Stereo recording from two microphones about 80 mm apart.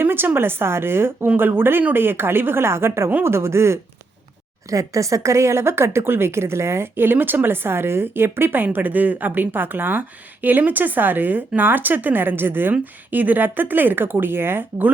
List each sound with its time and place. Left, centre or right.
0.0 s a woman's voice: right